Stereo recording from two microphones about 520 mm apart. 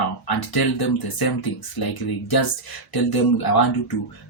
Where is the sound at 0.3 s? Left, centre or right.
Left.